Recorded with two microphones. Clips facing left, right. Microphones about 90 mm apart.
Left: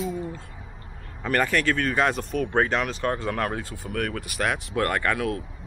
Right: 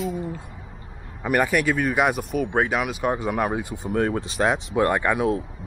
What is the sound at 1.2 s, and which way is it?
Speech, 10° right (ahead or behind).